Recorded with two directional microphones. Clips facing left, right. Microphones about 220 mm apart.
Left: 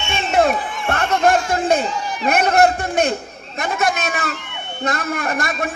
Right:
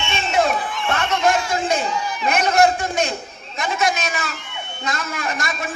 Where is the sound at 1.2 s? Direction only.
55° left (ahead or behind).